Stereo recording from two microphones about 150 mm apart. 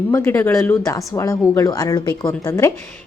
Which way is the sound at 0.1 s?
20° left (ahead or behind).